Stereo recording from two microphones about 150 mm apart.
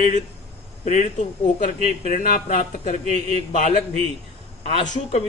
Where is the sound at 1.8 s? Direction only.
55° left (ahead or behind).